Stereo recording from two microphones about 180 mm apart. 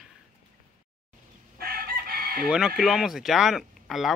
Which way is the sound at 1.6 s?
55° right (ahead or behind).